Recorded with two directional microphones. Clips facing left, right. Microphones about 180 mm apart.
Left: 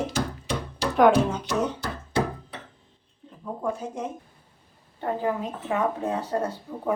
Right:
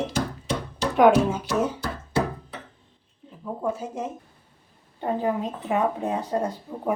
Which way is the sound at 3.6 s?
5° right (ahead or behind).